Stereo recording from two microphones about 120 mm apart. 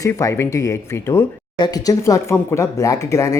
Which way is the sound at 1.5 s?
35° left (ahead or behind).